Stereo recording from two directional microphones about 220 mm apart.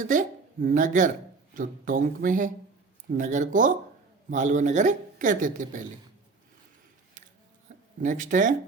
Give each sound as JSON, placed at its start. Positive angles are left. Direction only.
{"t": 0.0, "sound": "speech", "side_deg": -35}
{"t": 7.7, "sound": "a sound", "side_deg": -35}
{"t": 8.0, "sound": "speech", "side_deg": -35}